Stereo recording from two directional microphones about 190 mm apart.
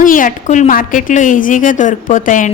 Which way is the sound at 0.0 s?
45° left (ahead or behind).